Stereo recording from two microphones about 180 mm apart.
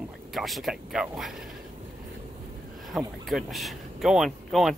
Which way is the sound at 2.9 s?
Centre (ahead or behind).